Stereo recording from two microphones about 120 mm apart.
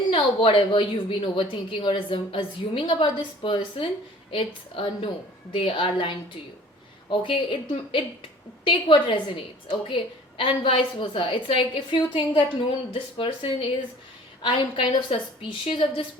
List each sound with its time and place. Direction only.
0.1 s a woman's voice: 45° left (ahead or behind)